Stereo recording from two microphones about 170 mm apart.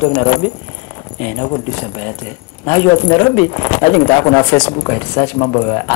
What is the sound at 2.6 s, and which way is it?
Speech, 15° left (ahead or behind).